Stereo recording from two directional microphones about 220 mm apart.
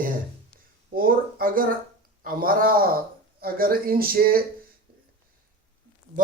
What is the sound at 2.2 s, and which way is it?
Speech, 40° right (ahead or behind).